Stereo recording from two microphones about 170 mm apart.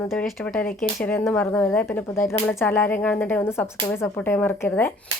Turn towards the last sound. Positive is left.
turn(degrees=10)  # may be behind; listen again after turning